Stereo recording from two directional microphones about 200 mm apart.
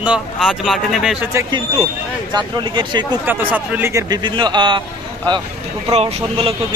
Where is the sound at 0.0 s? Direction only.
5° right (ahead or behind).